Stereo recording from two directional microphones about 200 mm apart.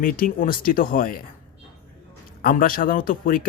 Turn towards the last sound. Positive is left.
turn(degrees=45)  # may be behind; listen again after turning